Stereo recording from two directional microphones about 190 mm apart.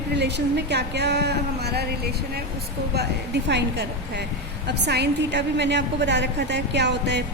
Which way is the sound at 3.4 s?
65° right (ahead or behind).